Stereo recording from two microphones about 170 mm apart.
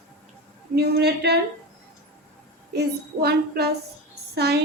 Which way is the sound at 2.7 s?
70° right (ahead or behind).